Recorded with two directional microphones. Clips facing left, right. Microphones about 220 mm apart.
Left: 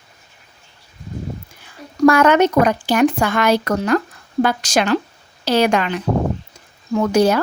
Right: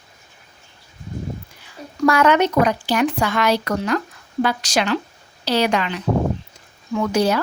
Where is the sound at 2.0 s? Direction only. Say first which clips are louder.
Left 4 dB; 50° left (ahead or behind).